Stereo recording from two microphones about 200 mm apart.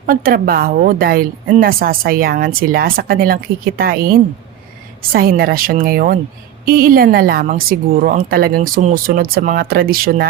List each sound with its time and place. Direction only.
0.0 s a woman's voice: 45° right (ahead or behind)